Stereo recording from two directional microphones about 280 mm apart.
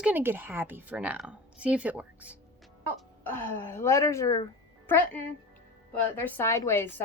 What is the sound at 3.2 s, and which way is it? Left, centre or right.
A woman's voice, centre.